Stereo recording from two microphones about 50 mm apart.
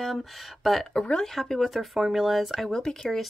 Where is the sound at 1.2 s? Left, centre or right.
Centre.